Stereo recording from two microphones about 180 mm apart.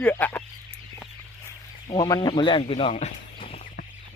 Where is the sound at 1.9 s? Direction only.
25° left (ahead or behind).